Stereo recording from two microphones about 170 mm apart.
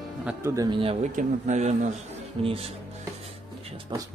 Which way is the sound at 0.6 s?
30° right (ahead or behind).